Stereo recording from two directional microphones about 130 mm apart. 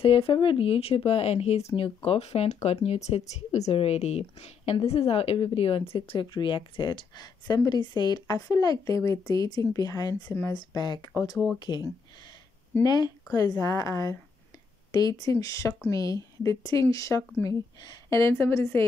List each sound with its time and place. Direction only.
0.0 s speech: 45° left (ahead or behind); by 18.9 s 20° left (ahead or behind)